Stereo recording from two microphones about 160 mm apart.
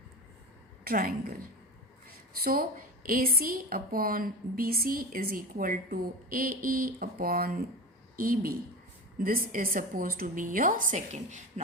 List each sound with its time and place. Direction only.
0.9 s a woman's voice: 65° right (ahead or behind); by 11.6 s 50° right (ahead or behind)